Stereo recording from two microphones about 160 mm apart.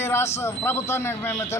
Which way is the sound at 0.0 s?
15° left (ahead or behind).